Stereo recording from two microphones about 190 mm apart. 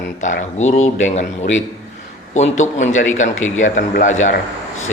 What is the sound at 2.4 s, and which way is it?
Speech, 40° left (ahead or behind).